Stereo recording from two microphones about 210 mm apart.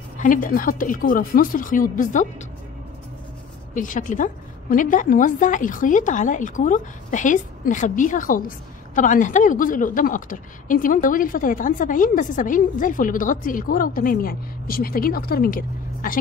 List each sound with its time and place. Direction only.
0.2 s a woman's voice: 40° left (ahead or behind)
3.7 s a woman's voice: 40° left (ahead or behind)